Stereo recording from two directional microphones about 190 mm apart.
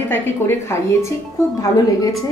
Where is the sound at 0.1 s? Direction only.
15° left (ahead or behind).